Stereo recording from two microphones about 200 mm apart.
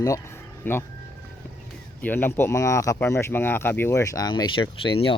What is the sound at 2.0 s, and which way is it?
Speech, 10° left (ahead or behind).